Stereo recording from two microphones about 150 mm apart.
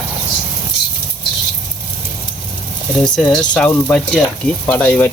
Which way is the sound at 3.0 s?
5° left (ahead or behind).